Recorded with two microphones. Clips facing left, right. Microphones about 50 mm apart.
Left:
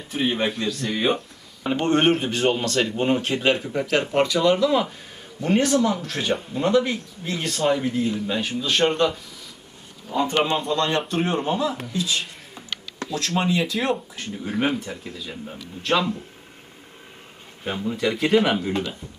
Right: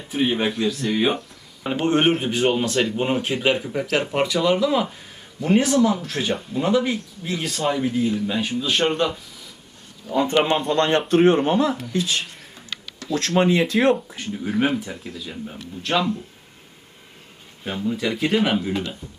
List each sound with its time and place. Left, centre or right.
0.1 s speech: centre
10.2 s a man's voice: right
13.3 s a man's voice: right
13.7 s speech: centre
17.6 s speech: centre